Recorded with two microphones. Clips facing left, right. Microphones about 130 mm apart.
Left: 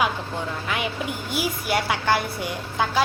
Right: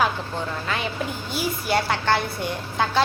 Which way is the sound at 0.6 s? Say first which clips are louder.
Even; 15° left (ahead or behind).